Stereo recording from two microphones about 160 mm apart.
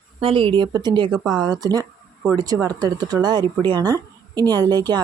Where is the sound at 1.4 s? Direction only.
25° right (ahead or behind).